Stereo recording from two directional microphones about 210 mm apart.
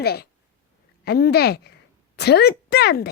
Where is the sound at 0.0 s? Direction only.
50° left (ahead or behind).